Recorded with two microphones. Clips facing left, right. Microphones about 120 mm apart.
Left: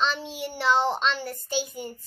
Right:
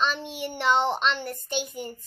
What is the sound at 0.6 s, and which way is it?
Speech, 20° right (ahead or behind).